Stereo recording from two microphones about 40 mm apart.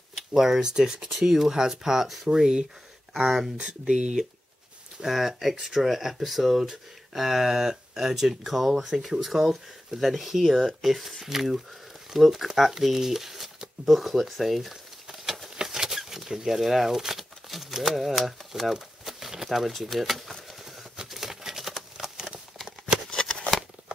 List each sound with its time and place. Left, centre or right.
0.3 s speech: centre
3.5 s speech: right
5.0 s speech: centre
12.8 s shuffling cards: centre
15.5 s patter: centre
16.3 s speech: centre
20.6 s a sound: centre
23.0 s a sound: centre